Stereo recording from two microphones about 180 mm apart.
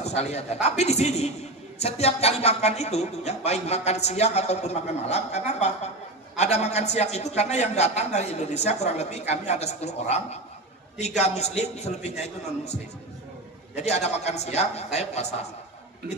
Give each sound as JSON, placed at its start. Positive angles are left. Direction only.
{"t": 0.0, "sound": "a man's voice", "side_deg": 35}
{"t": 13.7, "sound": "a man's voice", "side_deg": 40}